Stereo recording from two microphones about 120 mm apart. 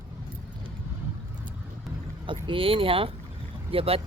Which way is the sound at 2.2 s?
45° right (ahead or behind).